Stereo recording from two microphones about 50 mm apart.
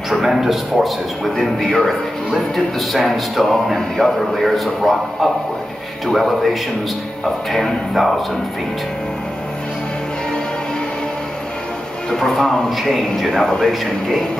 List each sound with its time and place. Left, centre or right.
0.1 s speech: centre
1.6 s a man's voice: centre
1.9 s speech: centre
12.1 s a man's voice: centre